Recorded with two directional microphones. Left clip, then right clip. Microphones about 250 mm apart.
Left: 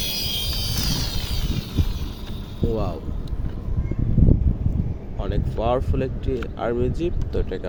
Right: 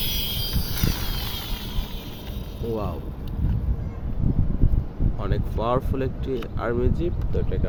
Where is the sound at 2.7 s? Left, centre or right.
Centre.